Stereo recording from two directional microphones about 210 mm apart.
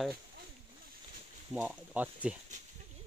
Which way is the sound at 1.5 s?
5° right (ahead or behind).